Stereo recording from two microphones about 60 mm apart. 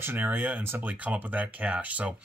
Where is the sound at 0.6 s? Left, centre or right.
Right.